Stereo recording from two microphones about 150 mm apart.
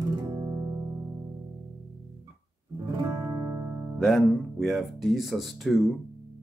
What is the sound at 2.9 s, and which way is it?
Music, 20° right (ahead or behind).